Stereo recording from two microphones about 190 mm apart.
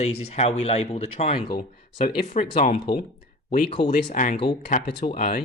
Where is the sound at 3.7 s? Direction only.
25° left (ahead or behind).